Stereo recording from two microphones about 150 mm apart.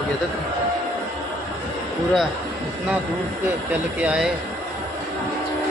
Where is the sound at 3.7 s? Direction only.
10° right (ahead or behind).